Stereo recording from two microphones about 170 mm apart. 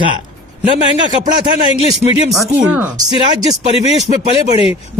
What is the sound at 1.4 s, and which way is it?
Speech, 35° left (ahead or behind).